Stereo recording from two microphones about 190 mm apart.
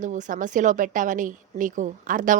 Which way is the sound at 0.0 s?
40° right (ahead or behind).